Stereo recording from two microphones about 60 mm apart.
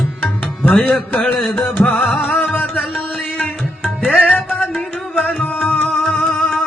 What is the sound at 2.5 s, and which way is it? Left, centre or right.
Music, left.